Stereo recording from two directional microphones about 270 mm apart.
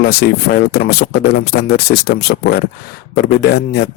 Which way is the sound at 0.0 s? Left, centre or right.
Left.